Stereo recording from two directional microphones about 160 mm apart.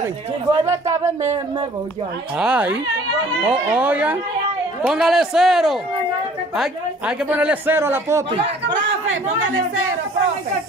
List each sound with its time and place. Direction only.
0.5 s a man's voice: 20° right (ahead or behind)
2.3 s a man's voice: 5° right (ahead or behind)